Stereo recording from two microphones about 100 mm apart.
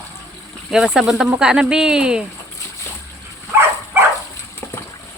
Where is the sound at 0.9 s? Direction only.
5° right (ahead or behind).